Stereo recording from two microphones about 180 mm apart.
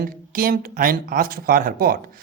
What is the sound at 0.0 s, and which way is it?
Speech, 55° right (ahead or behind).